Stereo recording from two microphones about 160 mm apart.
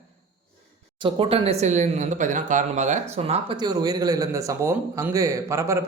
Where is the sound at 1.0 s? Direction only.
35° right (ahead or behind).